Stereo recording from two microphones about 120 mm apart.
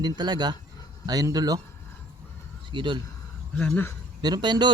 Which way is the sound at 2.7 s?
40° right (ahead or behind).